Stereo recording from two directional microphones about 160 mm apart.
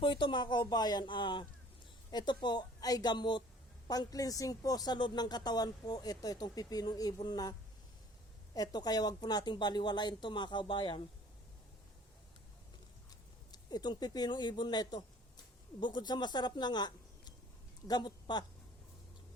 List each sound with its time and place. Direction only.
0.0 s speech: 30° left (ahead or behind)
8.5 s speech: 25° left (ahead or behind)
13.5 s speech: 25° left (ahead or behind)